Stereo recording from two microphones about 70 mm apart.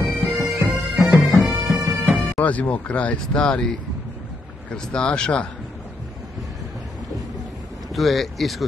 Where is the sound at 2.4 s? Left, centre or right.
Centre.